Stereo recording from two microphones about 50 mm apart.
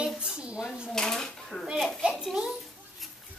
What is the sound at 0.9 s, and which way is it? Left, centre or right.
Speech, centre.